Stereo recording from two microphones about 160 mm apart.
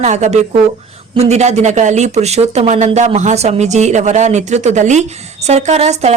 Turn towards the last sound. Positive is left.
turn(degrees=-45)  # may be behind; listen again after turning